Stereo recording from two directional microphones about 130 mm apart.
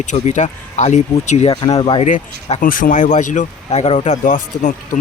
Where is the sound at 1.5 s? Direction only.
40° left (ahead or behind).